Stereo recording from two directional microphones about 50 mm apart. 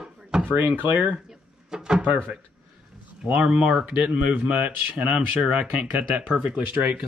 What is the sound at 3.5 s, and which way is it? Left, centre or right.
Speech, centre.